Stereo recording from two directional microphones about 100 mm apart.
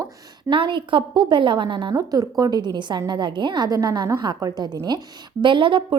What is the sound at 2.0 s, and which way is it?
A woman's voice, 40° right (ahead or behind).